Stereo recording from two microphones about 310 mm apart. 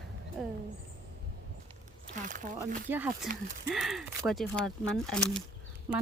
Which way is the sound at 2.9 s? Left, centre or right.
Centre.